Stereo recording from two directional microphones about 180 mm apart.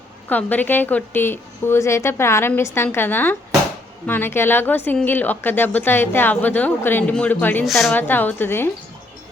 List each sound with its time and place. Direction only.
0.3 s a woman's voice: 10° left (ahead or behind)
7.9 s a woman's voice: 10° left (ahead or behind)